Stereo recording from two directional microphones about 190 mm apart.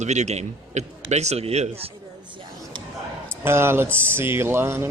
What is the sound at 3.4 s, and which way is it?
Speech, 10° right (ahead or behind).